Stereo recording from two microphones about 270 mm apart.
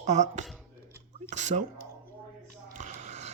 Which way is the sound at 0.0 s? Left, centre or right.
Right.